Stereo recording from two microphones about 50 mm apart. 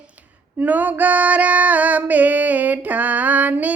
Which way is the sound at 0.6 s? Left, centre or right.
Right.